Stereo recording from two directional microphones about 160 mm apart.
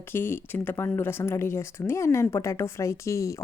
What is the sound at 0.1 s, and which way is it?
A woman's voice, 15° left (ahead or behind).